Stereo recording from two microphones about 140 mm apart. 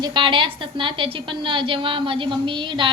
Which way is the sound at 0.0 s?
35° right (ahead or behind).